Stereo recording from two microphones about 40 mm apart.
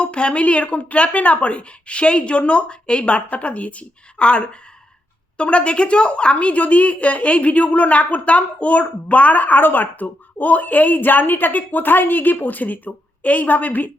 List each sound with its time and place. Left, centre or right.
0.0 s a woman's voice: left
4.2 s a woman's voice: left